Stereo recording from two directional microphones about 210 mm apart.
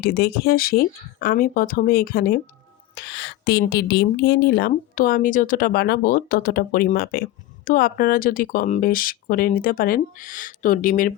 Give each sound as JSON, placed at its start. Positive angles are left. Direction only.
{"t": 0.0, "sound": "a woman's voice", "side_deg": 45}